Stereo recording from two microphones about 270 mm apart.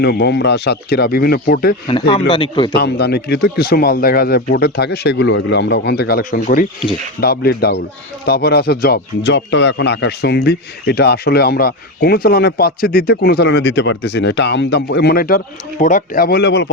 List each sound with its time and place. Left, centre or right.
0.0 s speech: left
1.9 s speech: centre
2.7 s speech: left